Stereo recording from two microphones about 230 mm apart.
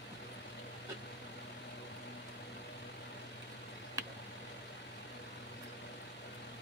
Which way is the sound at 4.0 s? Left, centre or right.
Centre.